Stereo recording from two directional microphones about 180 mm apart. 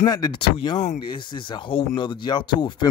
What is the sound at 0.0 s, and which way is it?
Speech, 20° left (ahead or behind).